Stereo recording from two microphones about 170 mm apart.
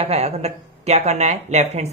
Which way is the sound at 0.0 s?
40° right (ahead or behind).